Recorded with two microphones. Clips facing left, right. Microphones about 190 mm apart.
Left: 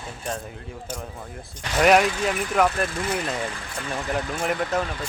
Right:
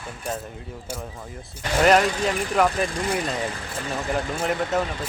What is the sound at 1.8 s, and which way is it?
Speech, 5° left (ahead or behind).